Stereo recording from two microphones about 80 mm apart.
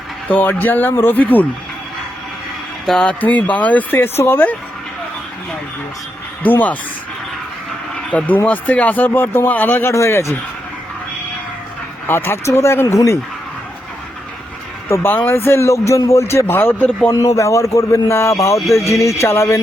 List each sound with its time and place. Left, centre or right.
0.3 s speech: left
2.8 s speech: centre
3.1 s speech: centre
6.4 s speech: left
7.9 s a sound: centre
8.4 s a man's voice: centre; by 10.3 s left
12.0 s a man's voice: left
14.8 s a man's voice: left
16.7 s a man's voice: centre
17.1 s a man's voice: left